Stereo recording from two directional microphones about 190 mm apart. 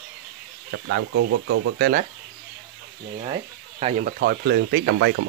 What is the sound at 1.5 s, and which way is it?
Speech, 90° right.